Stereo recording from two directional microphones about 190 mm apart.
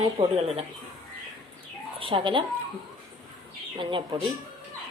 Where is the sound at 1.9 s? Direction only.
30° right (ahead or behind).